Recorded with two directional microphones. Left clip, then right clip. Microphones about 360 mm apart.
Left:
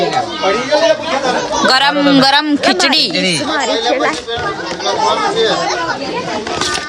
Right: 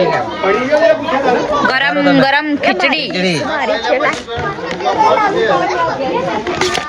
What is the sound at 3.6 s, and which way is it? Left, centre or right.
Speech, left.